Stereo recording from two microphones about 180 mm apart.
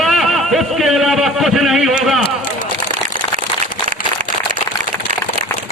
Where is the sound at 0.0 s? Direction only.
Centre (ahead or behind).